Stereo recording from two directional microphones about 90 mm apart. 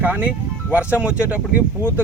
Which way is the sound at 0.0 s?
20° right (ahead or behind).